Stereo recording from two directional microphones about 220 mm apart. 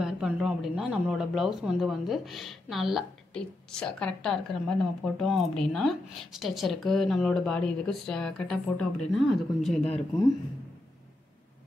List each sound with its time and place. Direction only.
0.0 s speech: centre (ahead or behind)
9.8 s speech: 30° left (ahead or behind)